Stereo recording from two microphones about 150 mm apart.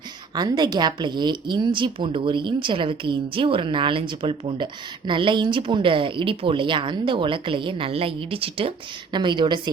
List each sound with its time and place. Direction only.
0.3 s a woman's voice: 30° right (ahead or behind)